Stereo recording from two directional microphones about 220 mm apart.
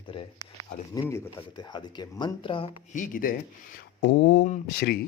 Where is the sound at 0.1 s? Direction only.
25° left (ahead or behind).